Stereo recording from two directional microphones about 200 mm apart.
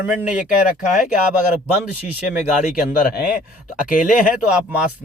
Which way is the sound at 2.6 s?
45° left (ahead or behind).